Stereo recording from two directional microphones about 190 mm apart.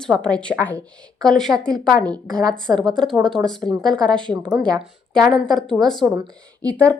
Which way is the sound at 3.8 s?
5° left (ahead or behind).